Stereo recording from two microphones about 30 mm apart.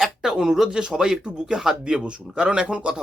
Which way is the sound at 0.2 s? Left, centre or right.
Centre.